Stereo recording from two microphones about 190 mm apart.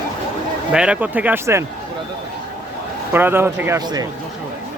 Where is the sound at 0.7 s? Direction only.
5° right (ahead or behind).